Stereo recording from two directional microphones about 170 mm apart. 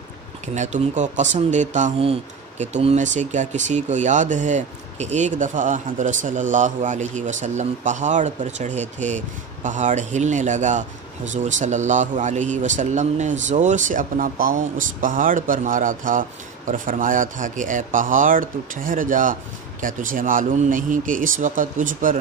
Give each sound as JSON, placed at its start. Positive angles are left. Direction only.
{"t": 0.6, "sound": "speech", "side_deg": -45}